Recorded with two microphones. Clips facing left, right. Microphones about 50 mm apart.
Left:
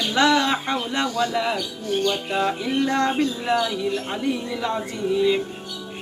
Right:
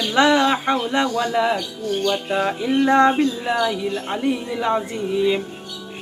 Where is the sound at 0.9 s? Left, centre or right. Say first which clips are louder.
Right 3 dB; centre.